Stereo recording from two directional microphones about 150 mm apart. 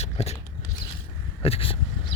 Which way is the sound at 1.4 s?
40° left (ahead or behind).